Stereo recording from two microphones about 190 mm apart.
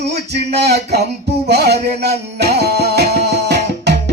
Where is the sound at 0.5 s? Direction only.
60° right (ahead or behind).